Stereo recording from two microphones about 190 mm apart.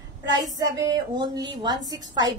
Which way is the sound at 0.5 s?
20° right (ahead or behind).